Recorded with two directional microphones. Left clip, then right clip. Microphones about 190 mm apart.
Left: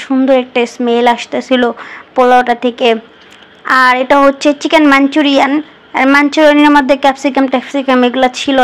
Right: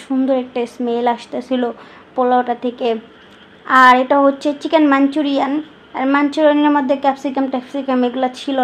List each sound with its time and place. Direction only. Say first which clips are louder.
0.1 s speech: left 7 dB; 25° left (ahead or behind)